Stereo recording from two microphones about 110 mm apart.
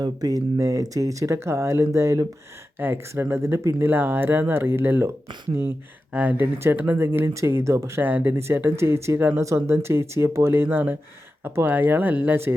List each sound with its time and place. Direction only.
0.0 s speech: 35° right (ahead or behind)
6.1 s speech: 15° right (ahead or behind)